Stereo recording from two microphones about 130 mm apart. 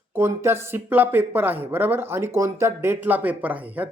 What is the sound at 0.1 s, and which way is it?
Speech, 15° right (ahead or behind).